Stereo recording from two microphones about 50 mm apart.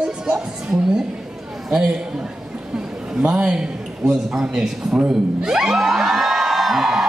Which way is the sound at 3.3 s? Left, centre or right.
Centre.